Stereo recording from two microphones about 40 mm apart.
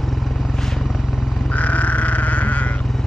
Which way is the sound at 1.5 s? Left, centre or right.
Left.